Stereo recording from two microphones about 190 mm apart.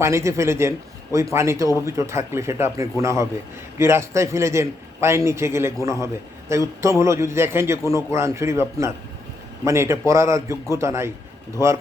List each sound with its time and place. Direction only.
0.0 s a man's voice: 15° right (ahead or behind)